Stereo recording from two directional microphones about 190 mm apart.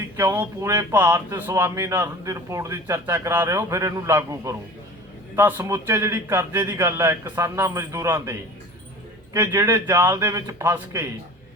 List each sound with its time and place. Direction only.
0.2 s speech: 15° right (ahead or behind)